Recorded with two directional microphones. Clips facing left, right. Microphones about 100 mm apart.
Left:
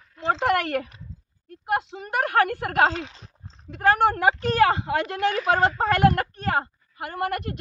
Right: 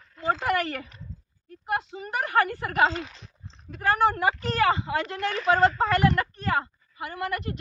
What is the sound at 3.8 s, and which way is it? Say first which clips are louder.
A woman's voice: left 3 dB; 55° left (ahead or behind).